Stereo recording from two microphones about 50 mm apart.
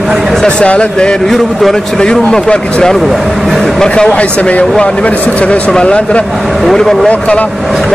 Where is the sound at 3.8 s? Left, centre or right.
Centre.